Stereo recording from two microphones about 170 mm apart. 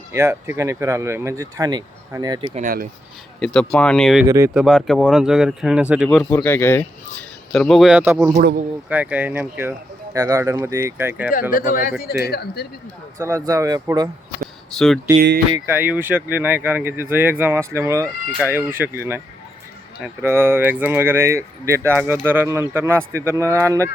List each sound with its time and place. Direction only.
0.1 s speech: 15° right (ahead or behind)
2.6 s speech: 55° right (ahead or behind)
3.4 s speech: 5° left (ahead or behind)
4.3 s speech: 15° right (ahead or behind)
4.5 s speech: centre (ahead or behind)
6.3 s speech: 15° left (ahead or behind); by 11.3 s 15° right (ahead or behind)
11.5 s speech: 55° left (ahead or behind)
12.2 s speech: 70° left (ahead or behind)
13.1 s speech: 20° right (ahead or behind)
15.5 s speech: 15° right (ahead or behind)